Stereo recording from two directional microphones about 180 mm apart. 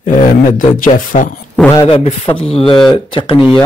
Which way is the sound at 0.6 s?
45° left (ahead or behind).